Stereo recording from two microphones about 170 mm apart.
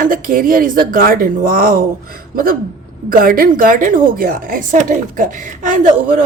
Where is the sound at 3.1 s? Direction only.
55° right (ahead or behind).